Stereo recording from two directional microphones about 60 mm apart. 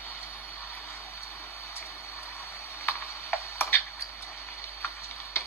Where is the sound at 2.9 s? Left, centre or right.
Left.